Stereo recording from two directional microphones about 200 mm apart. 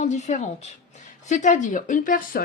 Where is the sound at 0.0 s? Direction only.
35° left (ahead or behind).